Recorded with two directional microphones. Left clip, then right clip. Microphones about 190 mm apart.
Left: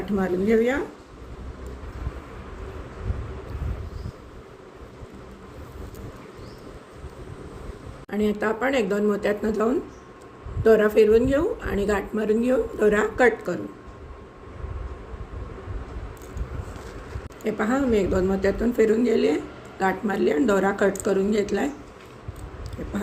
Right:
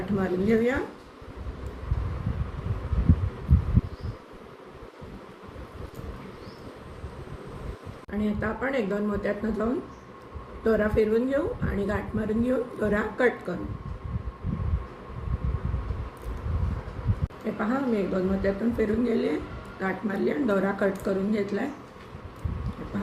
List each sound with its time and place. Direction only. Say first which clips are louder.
0.2 s speech: left 4 dB; 50° left (ahead or behind)
8.1 s speech: left 6 dB; 50° left (ahead or behind)
17.4 s speech: left 5 dB; 50° left (ahead or behind)